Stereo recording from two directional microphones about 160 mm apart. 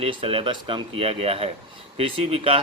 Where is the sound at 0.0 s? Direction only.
35° right (ahead or behind).